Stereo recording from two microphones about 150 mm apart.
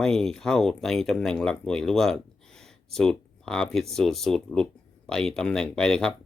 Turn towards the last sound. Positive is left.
turn(degrees=5)  # may be behind; listen again after turning